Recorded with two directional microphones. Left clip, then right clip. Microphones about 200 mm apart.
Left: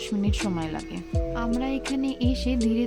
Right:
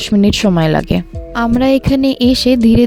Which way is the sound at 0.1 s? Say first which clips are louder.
Right 18 dB; 50° right (ahead or behind).